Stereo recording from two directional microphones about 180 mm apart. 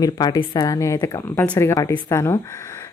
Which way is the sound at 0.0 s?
20° left (ahead or behind).